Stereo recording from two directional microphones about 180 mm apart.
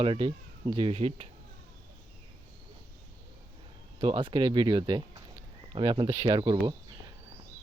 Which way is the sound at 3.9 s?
25° right (ahead or behind).